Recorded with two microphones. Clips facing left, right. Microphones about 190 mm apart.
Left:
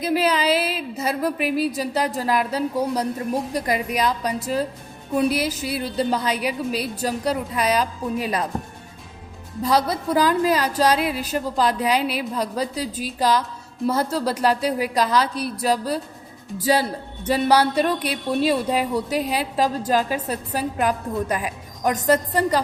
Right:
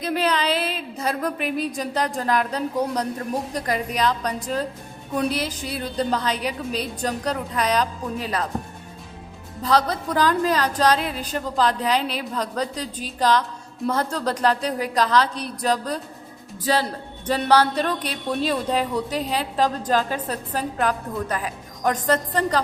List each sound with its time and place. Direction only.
0.0 s a woman's voice: 5° left (ahead or behind)
9.6 s a woman's voice: 10° left (ahead or behind)